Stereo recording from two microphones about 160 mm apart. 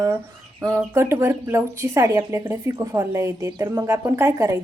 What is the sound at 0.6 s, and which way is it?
Speech, 20° right (ahead or behind).